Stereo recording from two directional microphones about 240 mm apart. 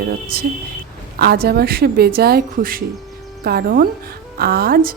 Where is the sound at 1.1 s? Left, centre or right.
Right.